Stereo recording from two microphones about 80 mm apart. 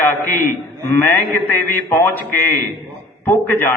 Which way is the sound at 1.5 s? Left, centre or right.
Left.